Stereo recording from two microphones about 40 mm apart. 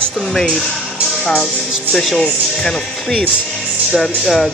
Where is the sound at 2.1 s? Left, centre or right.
Centre.